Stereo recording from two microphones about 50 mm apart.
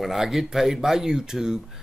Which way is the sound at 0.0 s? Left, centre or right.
Centre.